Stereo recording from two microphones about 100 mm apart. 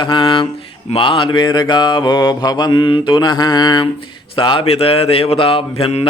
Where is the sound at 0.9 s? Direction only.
60° left (ahead or behind).